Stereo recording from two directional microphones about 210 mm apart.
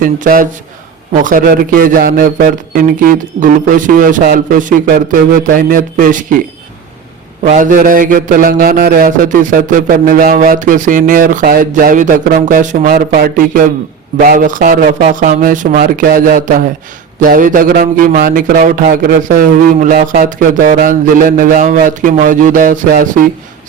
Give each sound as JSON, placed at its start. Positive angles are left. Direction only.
{"t": 0.0, "sound": "a man's voice", "side_deg": -40}
{"t": 7.4, "sound": "a man's voice", "side_deg": -35}